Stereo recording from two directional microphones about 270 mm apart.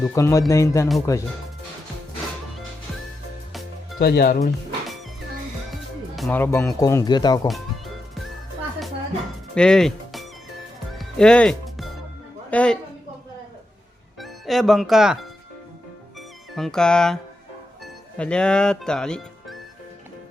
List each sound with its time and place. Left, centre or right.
0.0 s speech: centre
3.9 s speech: left
6.1 s speech: centre
9.6 s speech: centre
10.9 s music: centre
12.5 s a man's voice: centre
14.2 s speech: centre
16.6 s speech: centre